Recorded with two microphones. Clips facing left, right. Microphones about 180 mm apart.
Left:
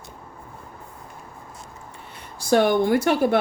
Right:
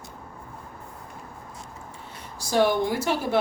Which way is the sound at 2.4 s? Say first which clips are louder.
Left 4 dB; 60° left (ahead or behind).